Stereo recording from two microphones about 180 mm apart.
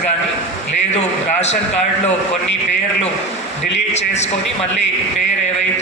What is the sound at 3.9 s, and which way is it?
Speech, 40° left (ahead or behind).